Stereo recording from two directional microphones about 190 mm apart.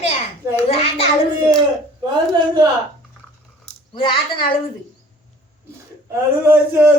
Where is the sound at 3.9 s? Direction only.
25° left (ahead or behind).